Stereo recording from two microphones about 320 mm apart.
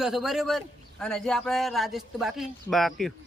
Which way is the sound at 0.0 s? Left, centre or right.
Centre.